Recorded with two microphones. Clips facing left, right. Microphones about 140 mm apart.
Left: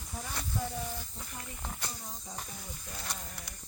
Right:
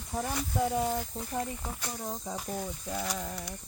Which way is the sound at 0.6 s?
75° right (ahead or behind).